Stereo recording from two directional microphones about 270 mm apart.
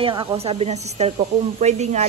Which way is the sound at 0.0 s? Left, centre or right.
Centre.